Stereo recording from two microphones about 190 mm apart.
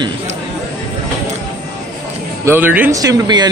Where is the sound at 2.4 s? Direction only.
10° right (ahead or behind).